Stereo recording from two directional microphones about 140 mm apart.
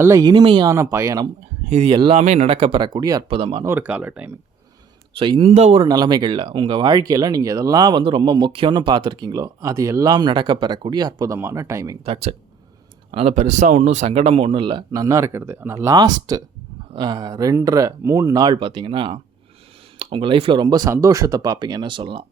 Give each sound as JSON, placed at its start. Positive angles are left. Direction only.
{"t": 0.0, "sound": "speech", "side_deg": -25}
{"t": 0.7, "sound": "speech", "side_deg": -20}
{"t": 1.7, "sound": "speech", "side_deg": -45}
{"t": 2.2, "sound": "speech", "side_deg": -50}
{"t": 3.2, "sound": "speech", "side_deg": -40}
{"t": 3.6, "sound": "speech", "side_deg": -15}
{"t": 5.1, "sound": "speech", "side_deg": -40}
{"t": 5.8, "sound": "speech", "side_deg": -30}
{"t": 11.3, "sound": "speech", "side_deg": -20}
{"t": 12.0, "sound": "speech", "side_deg": -40}
{"t": 15.0, "sound": "speech", "side_deg": -20}